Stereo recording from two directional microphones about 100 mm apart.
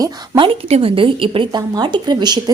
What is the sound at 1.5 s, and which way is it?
Speech, 45° right (ahead or behind).